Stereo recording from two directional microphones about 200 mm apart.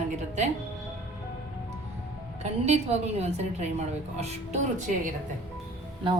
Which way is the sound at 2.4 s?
35° right (ahead or behind).